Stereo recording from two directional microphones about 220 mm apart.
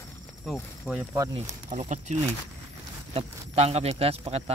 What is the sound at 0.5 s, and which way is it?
Speech, centre (ahead or behind).